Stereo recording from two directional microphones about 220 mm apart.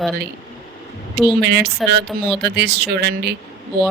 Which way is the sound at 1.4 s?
50° right (ahead or behind).